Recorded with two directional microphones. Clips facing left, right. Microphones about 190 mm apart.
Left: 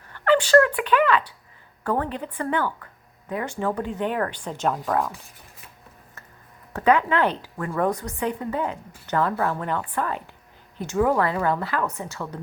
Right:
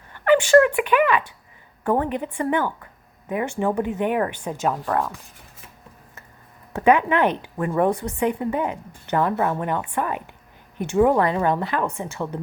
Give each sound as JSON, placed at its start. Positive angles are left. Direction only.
{"t": 0.1, "sound": "a woman's voice", "side_deg": -10}
{"t": 4.6, "sound": "speech", "side_deg": 0}
{"t": 6.7, "sound": "a woman's voice", "side_deg": -15}